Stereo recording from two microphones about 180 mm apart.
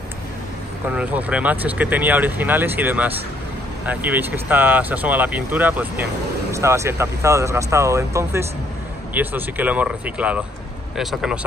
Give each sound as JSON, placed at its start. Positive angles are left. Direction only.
{"t": 0.8, "sound": "speech", "side_deg": -10}